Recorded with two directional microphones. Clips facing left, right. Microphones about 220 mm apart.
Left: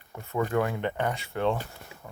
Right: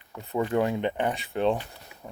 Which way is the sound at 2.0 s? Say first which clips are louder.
Right 4 dB; 20° right (ahead or behind).